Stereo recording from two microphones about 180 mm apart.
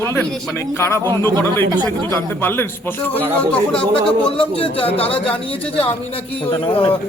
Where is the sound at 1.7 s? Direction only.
25° right (ahead or behind).